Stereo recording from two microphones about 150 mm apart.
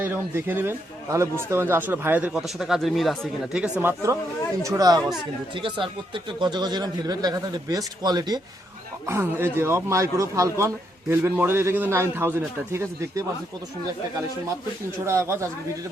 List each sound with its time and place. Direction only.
0.0 s speech: 15° right (ahead or behind)
3.8 s speech: 15° right (ahead or behind)
9.0 s speech: 15° right (ahead or behind)
15.0 s speech: 20° right (ahead or behind)